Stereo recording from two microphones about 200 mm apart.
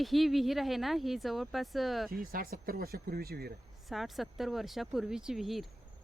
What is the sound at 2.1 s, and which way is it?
Speech, 45° right (ahead or behind).